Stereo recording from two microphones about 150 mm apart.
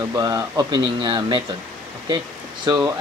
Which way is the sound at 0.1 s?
25° right (ahead or behind).